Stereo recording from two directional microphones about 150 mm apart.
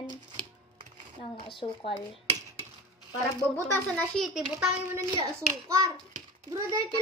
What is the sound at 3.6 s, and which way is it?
Speech, 15° left (ahead or behind).